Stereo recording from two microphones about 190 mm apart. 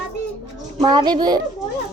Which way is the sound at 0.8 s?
20° right (ahead or behind).